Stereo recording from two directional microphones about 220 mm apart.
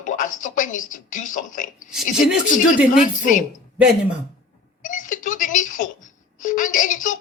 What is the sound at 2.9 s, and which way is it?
Speech, 35° left (ahead or behind).